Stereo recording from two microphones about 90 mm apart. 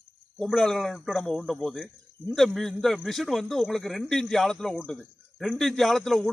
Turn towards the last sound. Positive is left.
turn(degrees=5)  # may be behind; listen again after turning